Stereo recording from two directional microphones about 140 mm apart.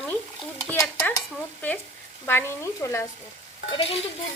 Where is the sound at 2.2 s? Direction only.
20° left (ahead or behind).